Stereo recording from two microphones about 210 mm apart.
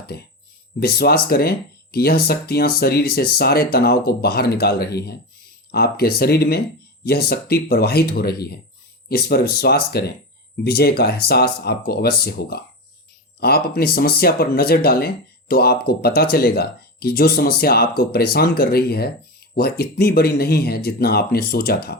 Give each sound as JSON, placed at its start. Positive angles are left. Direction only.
{"t": 0.8, "sound": "speech", "side_deg": 50}